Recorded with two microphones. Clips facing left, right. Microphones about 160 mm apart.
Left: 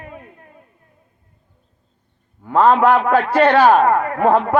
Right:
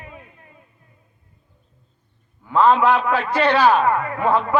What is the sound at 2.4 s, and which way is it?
A man's voice, 50° left (ahead or behind).